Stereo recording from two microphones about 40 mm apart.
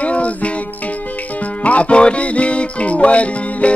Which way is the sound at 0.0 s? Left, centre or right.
Left.